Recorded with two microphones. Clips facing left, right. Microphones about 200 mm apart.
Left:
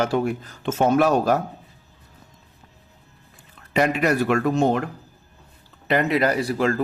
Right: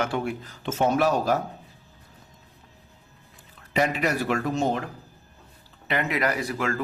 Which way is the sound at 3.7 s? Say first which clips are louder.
Left 4 dB; 60° left (ahead or behind).